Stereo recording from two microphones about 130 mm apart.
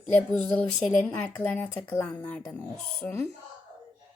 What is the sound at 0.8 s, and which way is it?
Speech, 10° left (ahead or behind).